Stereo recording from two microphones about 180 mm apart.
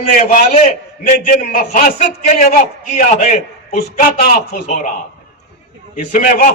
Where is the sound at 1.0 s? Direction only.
55° left (ahead or behind).